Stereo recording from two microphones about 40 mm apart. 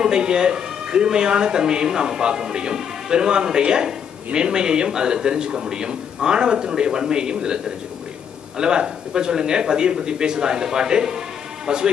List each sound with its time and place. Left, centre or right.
0.0 s speech: centre